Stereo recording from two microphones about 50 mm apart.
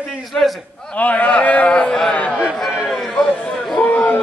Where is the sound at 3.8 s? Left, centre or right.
Left.